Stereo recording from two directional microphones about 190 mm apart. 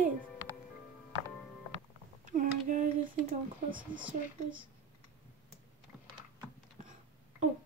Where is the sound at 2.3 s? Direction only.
45° right (ahead or behind).